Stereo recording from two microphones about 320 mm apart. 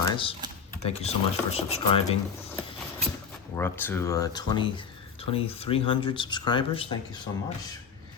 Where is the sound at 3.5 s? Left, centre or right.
Centre.